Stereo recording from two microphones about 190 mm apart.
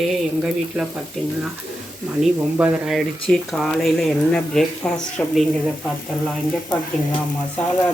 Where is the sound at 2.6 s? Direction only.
5° right (ahead or behind).